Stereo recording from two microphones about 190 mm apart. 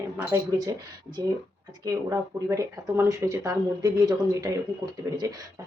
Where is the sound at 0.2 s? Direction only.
15° right (ahead or behind).